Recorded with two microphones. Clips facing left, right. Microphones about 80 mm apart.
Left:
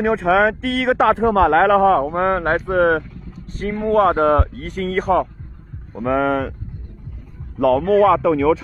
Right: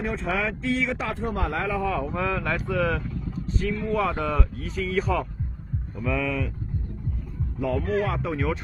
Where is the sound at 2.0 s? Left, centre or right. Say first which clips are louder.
Left 9 dB; left.